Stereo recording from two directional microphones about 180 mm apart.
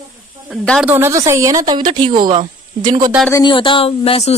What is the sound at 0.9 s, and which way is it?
Speech, 15° right (ahead or behind).